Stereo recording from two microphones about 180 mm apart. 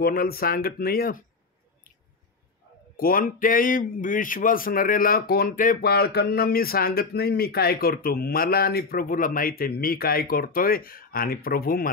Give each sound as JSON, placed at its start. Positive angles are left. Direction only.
{"t": 0.0, "sound": "speech", "side_deg": 55}
{"t": 3.0, "sound": "speech", "side_deg": 50}